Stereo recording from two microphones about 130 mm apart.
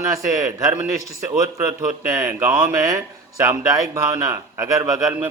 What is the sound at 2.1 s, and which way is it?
A man's voice, 20° right (ahead or behind).